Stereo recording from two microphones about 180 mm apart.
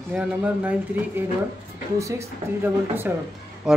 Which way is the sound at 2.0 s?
15° right (ahead or behind).